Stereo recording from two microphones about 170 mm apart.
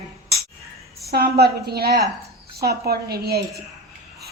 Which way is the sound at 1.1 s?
65° right (ahead or behind).